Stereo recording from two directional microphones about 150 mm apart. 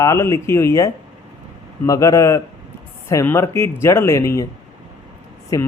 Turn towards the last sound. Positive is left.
turn(degrees=25)  # may be behind; listen again after turning